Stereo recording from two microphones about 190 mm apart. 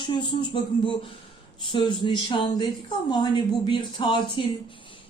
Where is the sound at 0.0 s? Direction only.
25° left (ahead or behind).